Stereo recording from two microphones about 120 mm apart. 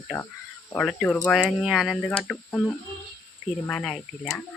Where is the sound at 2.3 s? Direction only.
15° left (ahead or behind).